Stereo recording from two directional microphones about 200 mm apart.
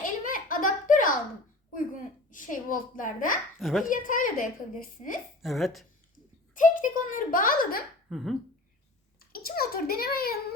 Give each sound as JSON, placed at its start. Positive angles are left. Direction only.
{"t": 0.0, "sound": "a sound", "side_deg": 45}
{"t": 2.3, "sound": "a child's voice", "side_deg": 40}
{"t": 3.6, "sound": "speech", "side_deg": 0}
{"t": 3.8, "sound": "a child's voice", "side_deg": 45}
{"t": 5.4, "sound": "speech", "side_deg": 0}
{"t": 6.5, "sound": "a child's voice", "side_deg": 40}
{"t": 8.1, "sound": "speech", "side_deg": 0}
{"t": 9.3, "sound": "a child's voice", "side_deg": 50}